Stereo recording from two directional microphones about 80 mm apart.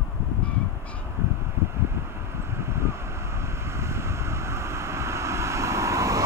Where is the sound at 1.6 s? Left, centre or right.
Right.